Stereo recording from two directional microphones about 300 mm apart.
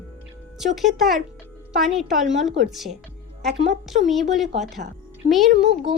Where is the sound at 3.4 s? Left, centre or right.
Right.